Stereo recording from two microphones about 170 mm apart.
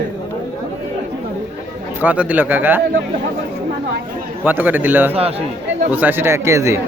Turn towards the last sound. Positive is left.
turn(degrees=-15)  # may be behind; listen again after turning